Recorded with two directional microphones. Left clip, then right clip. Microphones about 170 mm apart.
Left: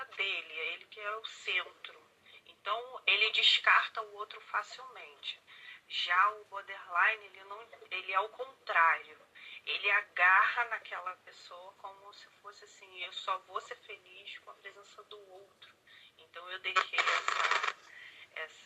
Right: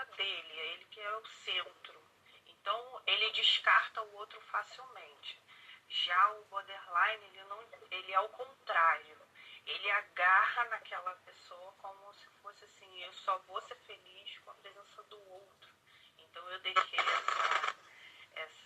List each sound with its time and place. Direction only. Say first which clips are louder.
0.2 s a sound: left 4 dB; 30° left (ahead or behind)
2.6 s speech: left 3 dB; 30° left (ahead or behind)
6.1 s speech: left 2 dB; 30° left (ahead or behind)
12.9 s speech: even; 30° left (ahead or behind)
16.3 s speech: even; 30° left (ahead or behind)